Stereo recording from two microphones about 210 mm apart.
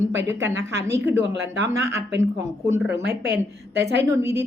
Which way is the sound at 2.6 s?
15° right (ahead or behind).